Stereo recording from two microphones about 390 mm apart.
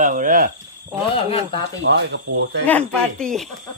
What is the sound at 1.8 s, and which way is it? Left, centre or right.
Speech, right.